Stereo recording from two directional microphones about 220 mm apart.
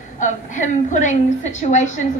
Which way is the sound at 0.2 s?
35° left (ahead or behind).